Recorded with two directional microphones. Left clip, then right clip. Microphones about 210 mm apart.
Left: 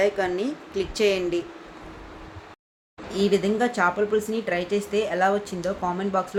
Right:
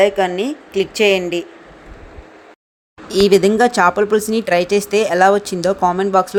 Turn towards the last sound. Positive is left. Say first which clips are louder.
# right 11 dB
turn(degrees=-45)  # may be behind; listen again after turning